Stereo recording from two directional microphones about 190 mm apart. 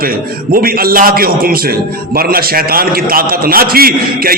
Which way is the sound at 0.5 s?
50° right (ahead or behind).